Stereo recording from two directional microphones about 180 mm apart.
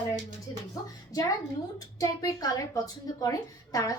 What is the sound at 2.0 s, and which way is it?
A woman's voice, 20° left (ahead or behind).